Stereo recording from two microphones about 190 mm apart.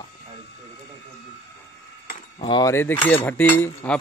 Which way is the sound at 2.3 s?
25° left (ahead or behind).